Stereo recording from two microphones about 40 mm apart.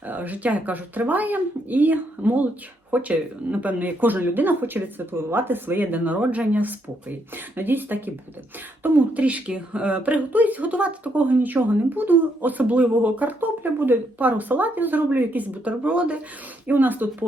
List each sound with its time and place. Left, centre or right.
0.1 s speech: right
6.1 s speech: right
9.1 s speech: right
14.2 s speech: right
15.6 s speech: right
16.6 s speech: right